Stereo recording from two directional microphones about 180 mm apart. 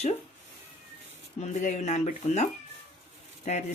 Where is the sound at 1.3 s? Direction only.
40° left (ahead or behind).